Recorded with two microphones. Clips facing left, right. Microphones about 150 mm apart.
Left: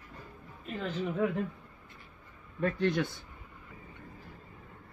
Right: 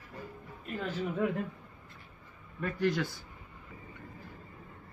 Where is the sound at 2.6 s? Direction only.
25° left (ahead or behind).